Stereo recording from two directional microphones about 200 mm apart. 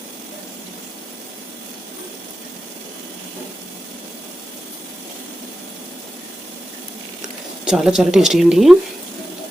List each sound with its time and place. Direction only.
7.6 s speech: 5° right (ahead or behind)